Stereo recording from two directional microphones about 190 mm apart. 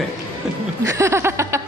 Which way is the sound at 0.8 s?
15° right (ahead or behind).